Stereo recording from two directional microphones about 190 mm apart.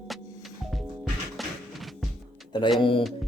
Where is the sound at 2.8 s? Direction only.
25° left (ahead or behind).